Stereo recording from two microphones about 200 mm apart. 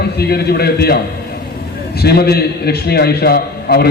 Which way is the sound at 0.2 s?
50° left (ahead or behind).